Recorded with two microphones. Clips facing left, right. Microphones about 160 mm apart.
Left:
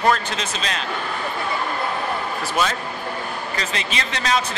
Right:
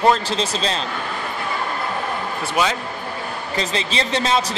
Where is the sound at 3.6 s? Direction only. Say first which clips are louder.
Right 6 dB; 30° right (ahead or behind).